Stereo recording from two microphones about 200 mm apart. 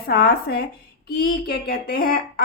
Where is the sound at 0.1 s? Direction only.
50° left (ahead or behind).